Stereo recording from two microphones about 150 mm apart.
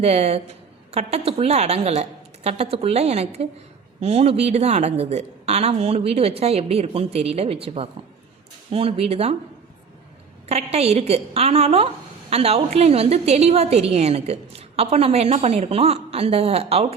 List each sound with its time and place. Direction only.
0.0 s a woman's voice: 45° right (ahead or behind)
10.5 s a woman's voice: 45° right (ahead or behind)